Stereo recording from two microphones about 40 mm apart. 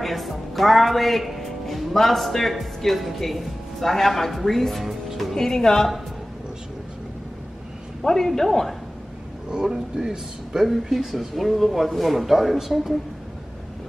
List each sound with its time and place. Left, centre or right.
0.0 s speech: centre
5.3 s speech: centre
8.0 s speech: centre
9.5 s speech: centre
10.6 s speech: centre